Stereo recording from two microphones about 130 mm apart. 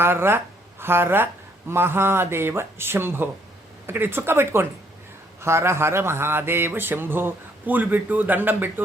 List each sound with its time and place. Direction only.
0.0 s mantra: 15° right (ahead or behind)